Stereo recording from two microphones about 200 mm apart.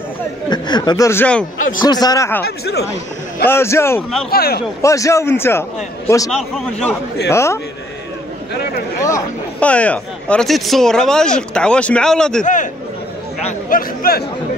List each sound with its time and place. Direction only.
0.5 s speech: 20° left (ahead or behind)
1.8 s speech: 20° left (ahead or behind)
2.4 s speech: 50° left (ahead or behind)
3.4 s a man's voice: 15° left (ahead or behind)
4.3 s speech: 50° left (ahead or behind)
4.8 s a man's voice: 15° left (ahead or behind)
9.0 s speech: 10° left (ahead or behind)
13.7 s speech: 45° left (ahead or behind)